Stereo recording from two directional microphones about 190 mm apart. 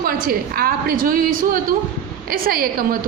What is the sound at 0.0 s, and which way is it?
A woman's voice, 50° right (ahead or behind).